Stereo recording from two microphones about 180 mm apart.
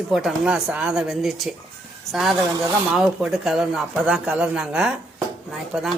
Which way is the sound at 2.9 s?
5° right (ahead or behind).